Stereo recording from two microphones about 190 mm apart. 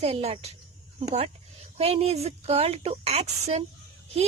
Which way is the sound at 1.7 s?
30° right (ahead or behind).